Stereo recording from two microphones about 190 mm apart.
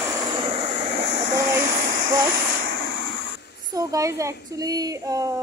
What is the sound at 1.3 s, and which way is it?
Speech, 15° right (ahead or behind).